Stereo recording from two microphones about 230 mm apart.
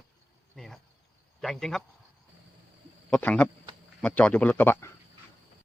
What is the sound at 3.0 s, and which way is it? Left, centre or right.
A man's voice, centre.